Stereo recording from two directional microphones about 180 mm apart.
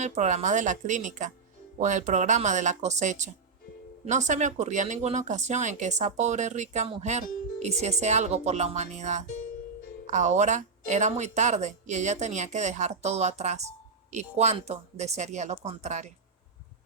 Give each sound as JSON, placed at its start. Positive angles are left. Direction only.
{"t": 0.0, "sound": "speech", "side_deg": -40}